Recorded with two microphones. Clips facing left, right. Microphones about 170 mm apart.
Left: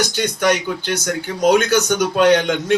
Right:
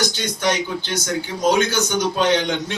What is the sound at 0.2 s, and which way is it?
Speech, 60° left (ahead or behind).